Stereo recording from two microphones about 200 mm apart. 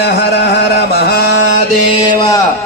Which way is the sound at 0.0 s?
55° left (ahead or behind).